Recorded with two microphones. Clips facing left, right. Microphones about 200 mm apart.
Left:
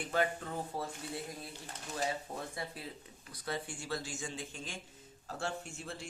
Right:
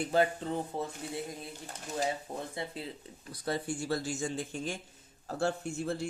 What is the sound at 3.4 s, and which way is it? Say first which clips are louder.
Speech: right 6 dB; 40° right (ahead or behind).